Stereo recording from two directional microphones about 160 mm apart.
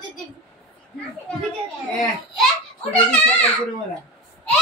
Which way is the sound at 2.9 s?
10° left (ahead or behind).